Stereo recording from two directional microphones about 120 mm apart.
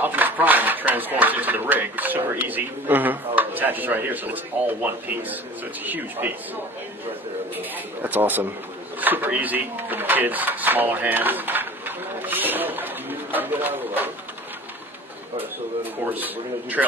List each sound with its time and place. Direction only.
0.0 s speech: 15° right (ahead or behind)
9.0 s drawer open or close: 15° right (ahead or behind)
15.3 s speech: 15° right (ahead or behind)